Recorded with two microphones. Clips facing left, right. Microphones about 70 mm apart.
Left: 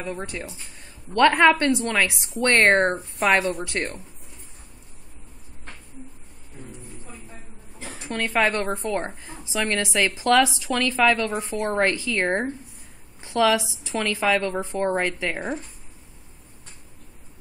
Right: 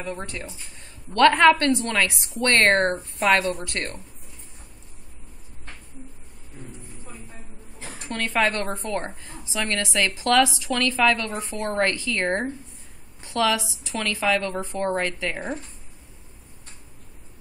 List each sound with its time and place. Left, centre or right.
0.0 s a woman's voice: centre
8.0 s a woman's voice: left